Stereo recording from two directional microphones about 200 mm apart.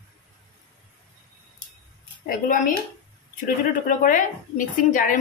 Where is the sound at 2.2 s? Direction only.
45° left (ahead or behind).